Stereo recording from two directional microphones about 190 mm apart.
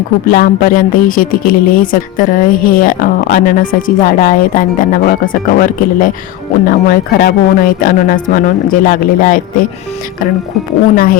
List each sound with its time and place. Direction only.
0.3 s a woman's voice: 45° left (ahead or behind)
10.9 s a woman's voice: 50° left (ahead or behind)